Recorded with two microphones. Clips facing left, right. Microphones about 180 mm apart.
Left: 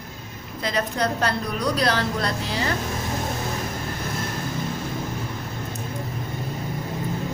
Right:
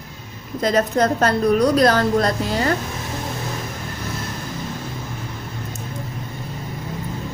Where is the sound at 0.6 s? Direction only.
45° right (ahead or behind).